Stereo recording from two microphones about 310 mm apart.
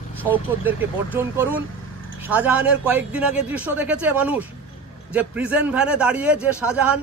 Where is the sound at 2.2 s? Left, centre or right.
Centre.